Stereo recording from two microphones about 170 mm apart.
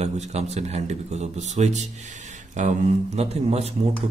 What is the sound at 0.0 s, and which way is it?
A man's voice, 40° right (ahead or behind).